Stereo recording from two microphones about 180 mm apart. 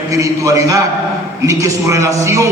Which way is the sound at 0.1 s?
20° right (ahead or behind).